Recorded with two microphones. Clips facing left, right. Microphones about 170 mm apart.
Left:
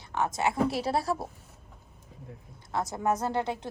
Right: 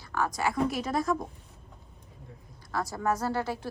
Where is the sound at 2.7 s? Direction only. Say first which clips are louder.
Left 1 dB; 20° left (ahead or behind).